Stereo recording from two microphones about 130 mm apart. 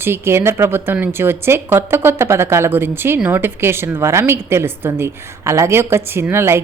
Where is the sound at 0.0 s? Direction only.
20° right (ahead or behind).